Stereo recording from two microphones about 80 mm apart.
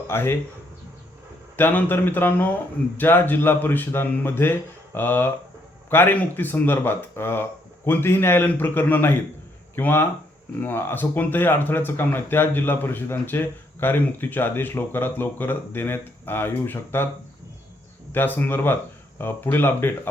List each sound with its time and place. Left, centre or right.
0.1 s speech: left
1.5 s speech: left
18.1 s speech: left